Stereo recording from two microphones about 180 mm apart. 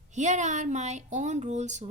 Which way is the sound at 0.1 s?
40° right (ahead or behind).